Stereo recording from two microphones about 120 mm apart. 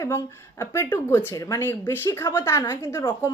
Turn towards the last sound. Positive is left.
turn(degrees=25)  # may be behind; listen again after turning